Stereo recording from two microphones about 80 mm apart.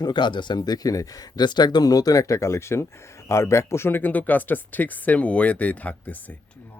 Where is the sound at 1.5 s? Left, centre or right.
Left.